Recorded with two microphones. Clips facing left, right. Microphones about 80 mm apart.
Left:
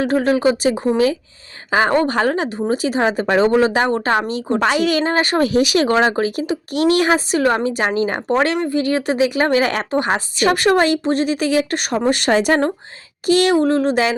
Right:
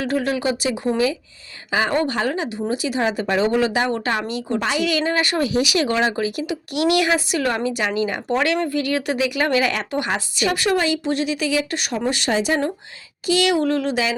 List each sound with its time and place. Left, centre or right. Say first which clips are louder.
0.0 s a woman's voice: left 6 dB; left